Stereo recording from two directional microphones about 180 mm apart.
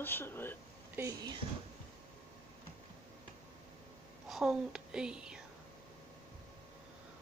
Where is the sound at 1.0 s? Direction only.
15° right (ahead or behind).